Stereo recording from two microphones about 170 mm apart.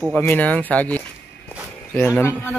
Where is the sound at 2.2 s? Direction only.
10° left (ahead or behind).